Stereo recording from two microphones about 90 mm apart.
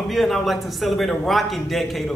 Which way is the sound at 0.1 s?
Centre (ahead or behind).